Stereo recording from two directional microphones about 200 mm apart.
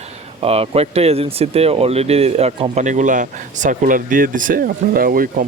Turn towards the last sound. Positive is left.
turn(degrees=-45)  # may be behind; listen again after turning